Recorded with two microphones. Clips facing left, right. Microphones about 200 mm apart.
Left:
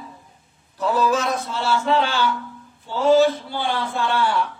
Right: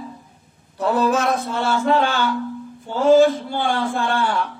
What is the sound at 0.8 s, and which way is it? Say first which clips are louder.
Speech: right 2 dB; 55° right (ahead or behind).